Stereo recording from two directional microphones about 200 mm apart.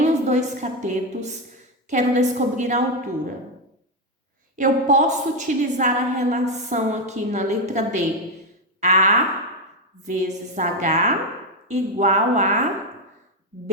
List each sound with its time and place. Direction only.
0.0 s a woman's voice: 35° right (ahead or behind)
4.5 s a woman's voice: 40° right (ahead or behind)